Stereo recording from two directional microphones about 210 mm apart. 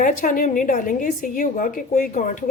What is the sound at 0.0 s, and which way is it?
A woman's voice, 40° left (ahead or behind).